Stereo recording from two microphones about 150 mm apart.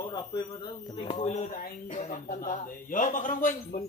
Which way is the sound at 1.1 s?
50° left (ahead or behind).